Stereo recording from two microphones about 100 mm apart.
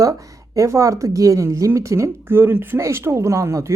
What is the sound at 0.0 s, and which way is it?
Speech, 35° right (ahead or behind).